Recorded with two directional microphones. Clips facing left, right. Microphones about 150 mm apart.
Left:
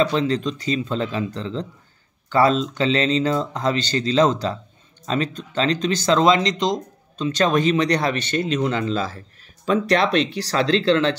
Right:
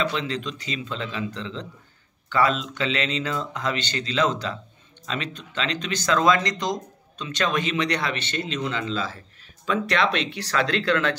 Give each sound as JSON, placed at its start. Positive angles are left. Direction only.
{"t": 0.0, "sound": "speech", "side_deg": 40}
{"t": 7.2, "sound": "speech", "side_deg": 35}